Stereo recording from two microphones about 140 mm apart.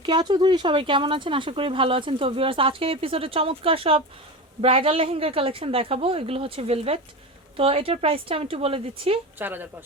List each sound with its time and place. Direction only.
0.0 s speech: 30° right (ahead or behind)
9.4 s a woman's voice: 15° right (ahead or behind)